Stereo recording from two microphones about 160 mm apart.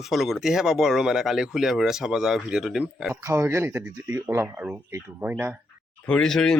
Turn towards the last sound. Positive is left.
turn(degrees=5)  # may be behind; listen again after turning